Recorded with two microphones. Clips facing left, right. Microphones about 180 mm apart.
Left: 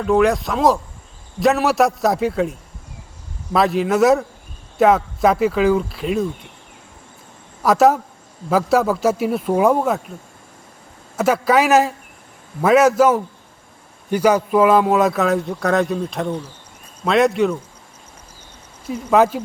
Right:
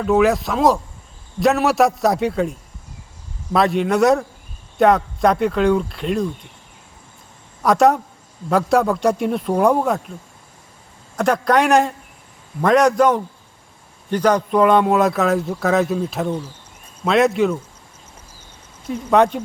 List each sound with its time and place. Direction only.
0.0 s a man's voice: centre (ahead or behind)
7.6 s a man's voice: centre (ahead or behind)
11.2 s a man's voice: 5° left (ahead or behind)
18.9 s a man's voice: 5° left (ahead or behind)